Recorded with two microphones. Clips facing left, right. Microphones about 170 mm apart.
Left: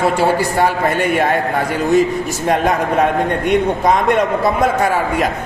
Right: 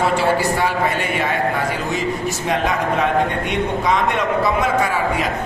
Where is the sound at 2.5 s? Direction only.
50° left (ahead or behind).